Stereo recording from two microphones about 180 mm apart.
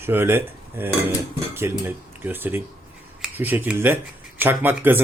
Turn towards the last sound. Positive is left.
turn(degrees=-10)  # may be behind; listen again after turning